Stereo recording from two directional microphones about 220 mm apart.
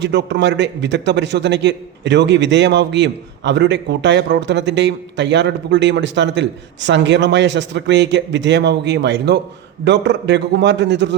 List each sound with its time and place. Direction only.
0.0 s a man's voice: 50° right (ahead or behind)